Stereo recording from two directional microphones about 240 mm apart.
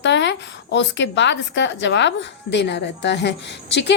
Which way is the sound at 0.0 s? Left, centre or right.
Left.